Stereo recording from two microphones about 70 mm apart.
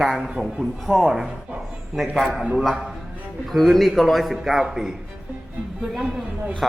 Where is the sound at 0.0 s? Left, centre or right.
Centre.